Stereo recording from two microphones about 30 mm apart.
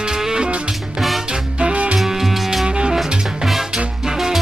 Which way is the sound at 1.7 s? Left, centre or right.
Right.